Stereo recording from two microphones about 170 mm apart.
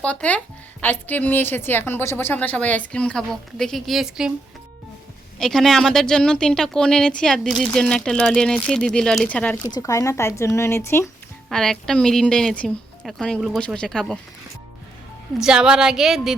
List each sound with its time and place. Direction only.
0.0 s speech: 5° left (ahead or behind)
5.4 s speech: centre (ahead or behind)
9.6 s speech: 20° left (ahead or behind)
11.4 s speech: centre (ahead or behind)
15.4 s speech: 5° right (ahead or behind)